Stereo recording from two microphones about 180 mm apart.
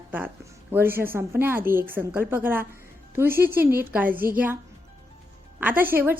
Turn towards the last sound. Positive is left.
turn(degrees=-10)  # may be behind; listen again after turning